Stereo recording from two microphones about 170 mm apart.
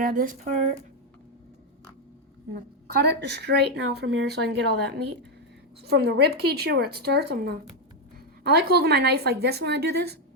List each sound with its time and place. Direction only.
0.0 s speech: 55° right (ahead or behind)
2.5 s a woman's voice: 75° right (ahead or behind); by 3.5 s 90° right
3.9 s speech: 75° right (ahead or behind)